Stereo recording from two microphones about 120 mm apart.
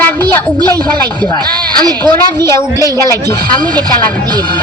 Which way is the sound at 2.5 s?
25° left (ahead or behind).